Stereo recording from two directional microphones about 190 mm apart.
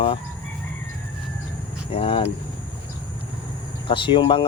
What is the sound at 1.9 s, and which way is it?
Speech, 30° left (ahead or behind).